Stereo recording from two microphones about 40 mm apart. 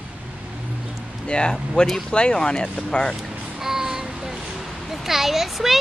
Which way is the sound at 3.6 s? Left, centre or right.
Centre.